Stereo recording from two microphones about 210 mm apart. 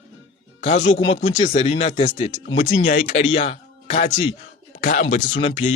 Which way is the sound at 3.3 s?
30° left (ahead or behind).